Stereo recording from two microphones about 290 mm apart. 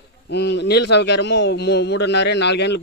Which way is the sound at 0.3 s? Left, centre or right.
Left.